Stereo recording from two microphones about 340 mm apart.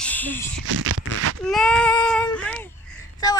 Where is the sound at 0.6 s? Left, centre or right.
Right.